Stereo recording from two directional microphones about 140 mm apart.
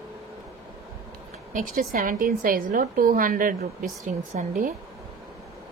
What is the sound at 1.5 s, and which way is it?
A woman's voice, 80° right.